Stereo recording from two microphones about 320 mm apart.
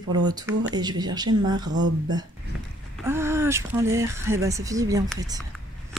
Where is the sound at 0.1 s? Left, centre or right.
Centre.